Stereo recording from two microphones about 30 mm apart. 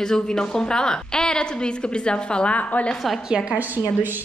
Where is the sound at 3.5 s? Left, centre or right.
Right.